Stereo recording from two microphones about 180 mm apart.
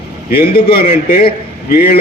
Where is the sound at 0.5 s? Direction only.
55° left (ahead or behind).